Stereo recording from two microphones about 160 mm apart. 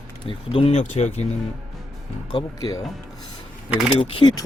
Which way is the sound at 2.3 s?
20° left (ahead or behind).